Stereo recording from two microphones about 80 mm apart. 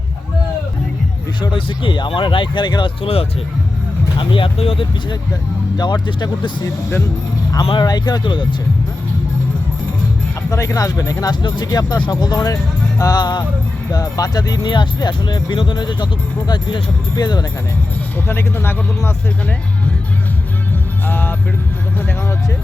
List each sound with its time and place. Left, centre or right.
1.4 s speech: left
4.2 s speech: left
5.7 s speech: left
7.7 s speech: left
10.5 s speech: left
11.3 s speech: left
13.9 s speech: left
18.3 s speech: left
21.1 s music: left